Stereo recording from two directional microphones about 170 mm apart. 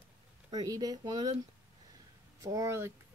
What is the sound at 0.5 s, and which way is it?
Speech, 20° right (ahead or behind).